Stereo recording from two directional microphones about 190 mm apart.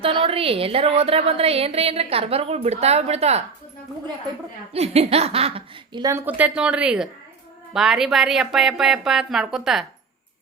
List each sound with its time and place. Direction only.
0.0 s a woman's voice: 30° right (ahead or behind)
4.7 s speech: 35° right (ahead or behind); by 9.8 s centre (ahead or behind)